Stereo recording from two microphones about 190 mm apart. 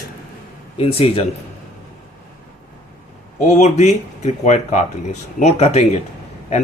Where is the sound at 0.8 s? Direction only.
30° left (ahead or behind).